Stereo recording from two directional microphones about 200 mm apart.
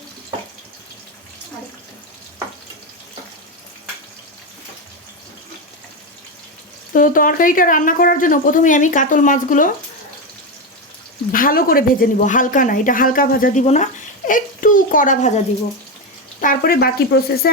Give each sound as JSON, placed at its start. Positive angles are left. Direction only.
{"t": 6.9, "sound": "speech", "side_deg": 45}
{"t": 11.3, "sound": "a woman's voice", "side_deg": 45}
{"t": 16.4, "sound": "a woman's voice", "side_deg": 45}